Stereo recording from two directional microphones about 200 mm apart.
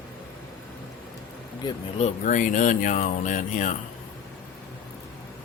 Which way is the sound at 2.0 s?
35° left (ahead or behind).